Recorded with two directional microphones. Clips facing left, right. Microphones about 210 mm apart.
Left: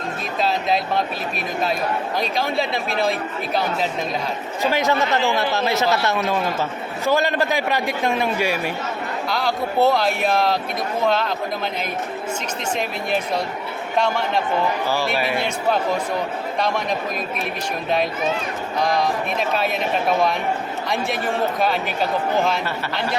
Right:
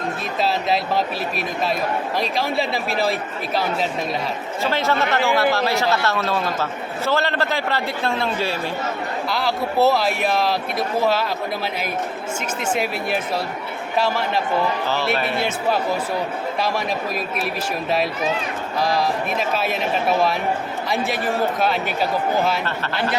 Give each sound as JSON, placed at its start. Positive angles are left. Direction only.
{"t": 0.3, "sound": "speech", "side_deg": 0}
{"t": 2.1, "sound": "speech", "side_deg": 0}
{"t": 4.6, "sound": "a man's voice", "side_deg": 15}
{"t": 9.3, "sound": "speech", "side_deg": -5}
{"t": 12.7, "sound": "speech", "side_deg": -5}
{"t": 18.8, "sound": "speech", "side_deg": -5}